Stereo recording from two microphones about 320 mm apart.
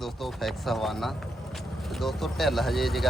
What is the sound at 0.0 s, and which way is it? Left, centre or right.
Speech, centre.